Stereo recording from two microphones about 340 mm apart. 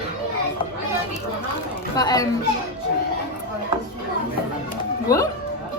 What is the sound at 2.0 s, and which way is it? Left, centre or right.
Speech, centre.